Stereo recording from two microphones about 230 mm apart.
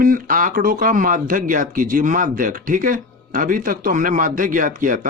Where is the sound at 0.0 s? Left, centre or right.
Right.